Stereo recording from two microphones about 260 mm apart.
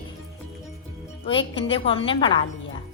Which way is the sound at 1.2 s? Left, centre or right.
Centre.